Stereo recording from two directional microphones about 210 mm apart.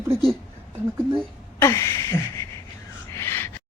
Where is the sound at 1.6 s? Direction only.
15° left (ahead or behind).